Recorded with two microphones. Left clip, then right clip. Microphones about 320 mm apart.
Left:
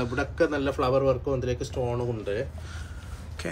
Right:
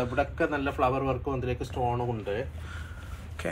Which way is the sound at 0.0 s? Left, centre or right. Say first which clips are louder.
Left 2 dB; centre.